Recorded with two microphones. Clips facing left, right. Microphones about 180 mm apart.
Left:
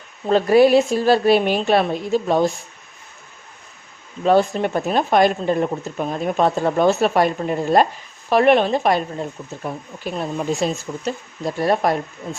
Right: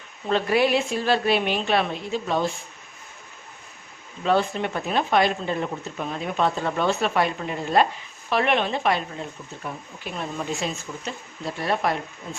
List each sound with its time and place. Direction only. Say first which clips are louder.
0.3 s speech: left 8 dB; 40° left (ahead or behind)
4.2 s speech: left 6 dB; 40° left (ahead or behind)